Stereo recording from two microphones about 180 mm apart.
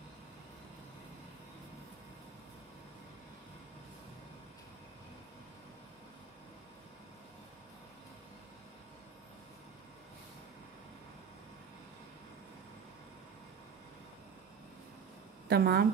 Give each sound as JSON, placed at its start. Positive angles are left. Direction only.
{"t": 15.4, "sound": "a woman's voice", "side_deg": -60}